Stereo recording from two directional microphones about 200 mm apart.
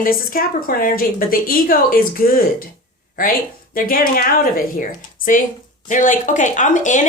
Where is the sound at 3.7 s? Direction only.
45° left (ahead or behind).